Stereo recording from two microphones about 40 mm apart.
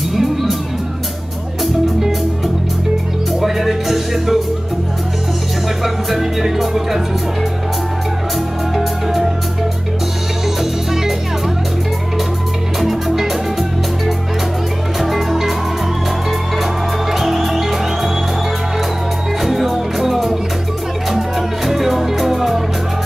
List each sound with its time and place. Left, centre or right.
0.1 s music: centre
1.6 s music: centre
3.3 s music: centre
6.0 s music: centre
8.7 s music: centre
10.6 s music: centre
12.8 s music: centre
17.1 s music: centre
19.4 s music: centre